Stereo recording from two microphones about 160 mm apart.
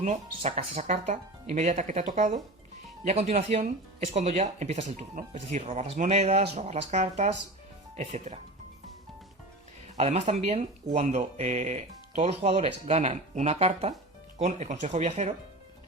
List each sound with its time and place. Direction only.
0.0 s speech: 45° right (ahead or behind)
10.0 s speech: 45° right (ahead or behind)